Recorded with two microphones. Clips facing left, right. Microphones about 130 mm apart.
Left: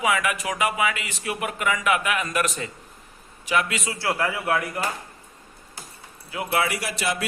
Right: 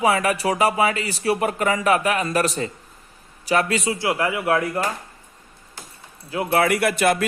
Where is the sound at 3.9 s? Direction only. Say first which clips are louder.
Right 3 dB; 15° right (ahead or behind).